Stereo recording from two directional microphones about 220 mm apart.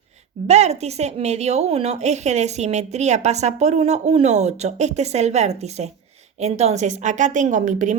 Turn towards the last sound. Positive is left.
turn(degrees=-35)  # may be behind; listen again after turning